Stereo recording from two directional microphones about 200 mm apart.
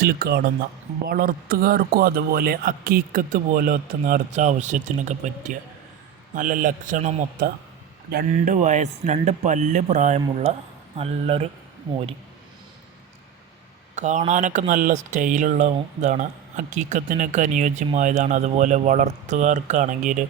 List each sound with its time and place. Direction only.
0.0 s a man's voice: 50° right (ahead or behind); by 11.4 s 30° right (ahead or behind)
13.9 s speech: 35° right (ahead or behind)